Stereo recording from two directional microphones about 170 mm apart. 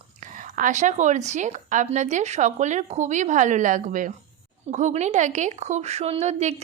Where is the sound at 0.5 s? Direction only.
45° right (ahead or behind).